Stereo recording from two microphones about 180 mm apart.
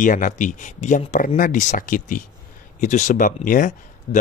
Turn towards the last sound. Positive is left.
turn(degrees=50)  # may be behind; listen again after turning